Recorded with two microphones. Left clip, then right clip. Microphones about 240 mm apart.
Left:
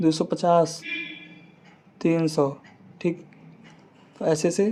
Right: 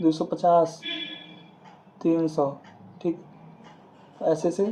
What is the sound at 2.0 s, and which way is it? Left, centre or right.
Speech, left.